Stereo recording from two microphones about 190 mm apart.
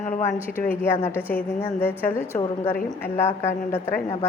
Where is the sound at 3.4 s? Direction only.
10° left (ahead or behind).